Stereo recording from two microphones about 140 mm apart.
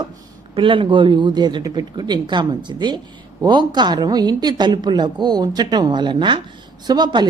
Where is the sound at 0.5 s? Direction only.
35° right (ahead or behind).